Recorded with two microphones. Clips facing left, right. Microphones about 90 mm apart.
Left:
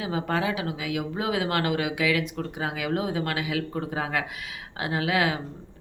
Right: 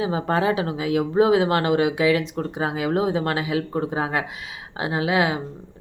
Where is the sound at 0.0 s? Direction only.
30° right (ahead or behind).